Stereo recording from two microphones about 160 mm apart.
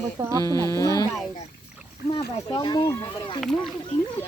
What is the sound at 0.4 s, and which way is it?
Speech, 20° left (ahead or behind).